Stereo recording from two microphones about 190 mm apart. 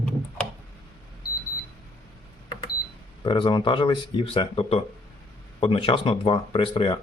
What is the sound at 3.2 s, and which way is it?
Speech, 25° left (ahead or behind).